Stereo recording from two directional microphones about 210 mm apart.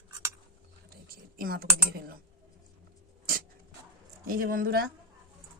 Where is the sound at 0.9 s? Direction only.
45° right (ahead or behind).